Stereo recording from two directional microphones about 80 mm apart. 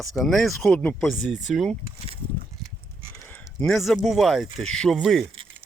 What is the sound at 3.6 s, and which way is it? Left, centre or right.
Speech, centre.